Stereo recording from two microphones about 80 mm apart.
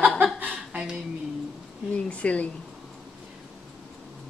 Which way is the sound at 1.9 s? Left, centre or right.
Centre.